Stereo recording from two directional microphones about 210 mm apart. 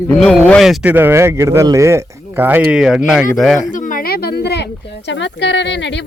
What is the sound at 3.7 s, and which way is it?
Speech, 40° left (ahead or behind).